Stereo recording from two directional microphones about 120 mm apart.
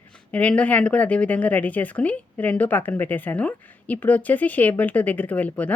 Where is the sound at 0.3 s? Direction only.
10° left (ahead or behind).